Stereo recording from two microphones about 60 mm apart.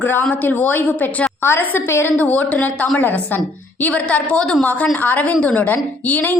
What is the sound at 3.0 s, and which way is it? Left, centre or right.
A woman's voice, left.